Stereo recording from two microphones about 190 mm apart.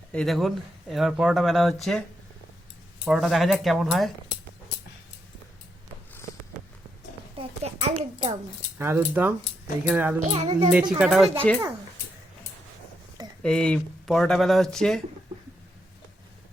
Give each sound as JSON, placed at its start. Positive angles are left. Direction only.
{"t": 0.1, "sound": "speech", "side_deg": 5}
{"t": 3.1, "sound": "speech", "side_deg": 0}
{"t": 7.3, "sound": "a sound", "side_deg": -35}
{"t": 8.8, "sound": "speech", "side_deg": -10}
{"t": 10.2, "sound": "a child's voice", "side_deg": -40}
{"t": 10.4, "sound": "a child's voice", "side_deg": -20}
{"t": 10.9, "sound": "speech", "side_deg": -5}
{"t": 13.4, "sound": "speech", "side_deg": 5}